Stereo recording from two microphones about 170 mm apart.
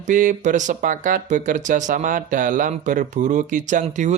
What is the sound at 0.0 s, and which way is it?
Speech, 50° right (ahead or behind).